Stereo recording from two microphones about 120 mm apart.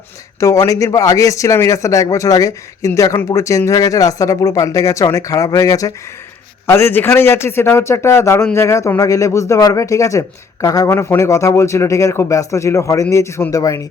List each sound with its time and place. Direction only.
0.3 s a man's voice: 25° left (ahead or behind)